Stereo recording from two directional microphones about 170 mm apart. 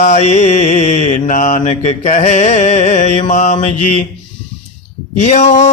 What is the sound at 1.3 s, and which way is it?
Male singing, 50° left (ahead or behind).